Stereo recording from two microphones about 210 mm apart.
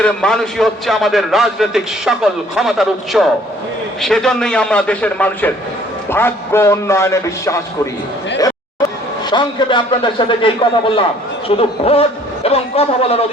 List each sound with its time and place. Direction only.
0.0 s a man's voice: 5° left (ahead or behind)
9.3 s a man's voice: 20° left (ahead or behind)